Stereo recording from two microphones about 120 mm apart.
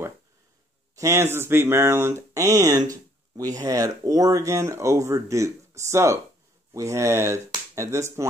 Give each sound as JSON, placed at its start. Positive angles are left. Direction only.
{"t": 0.9, "sound": "speech", "side_deg": -25}